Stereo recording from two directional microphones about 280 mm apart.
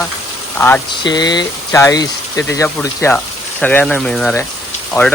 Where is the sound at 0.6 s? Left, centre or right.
Centre.